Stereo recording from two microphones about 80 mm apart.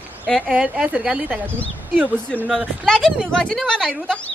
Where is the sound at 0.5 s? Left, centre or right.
Centre.